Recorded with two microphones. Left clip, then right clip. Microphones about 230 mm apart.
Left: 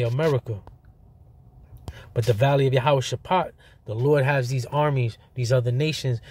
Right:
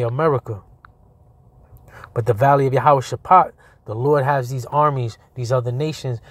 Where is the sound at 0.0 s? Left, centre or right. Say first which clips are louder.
Right 5 dB; centre.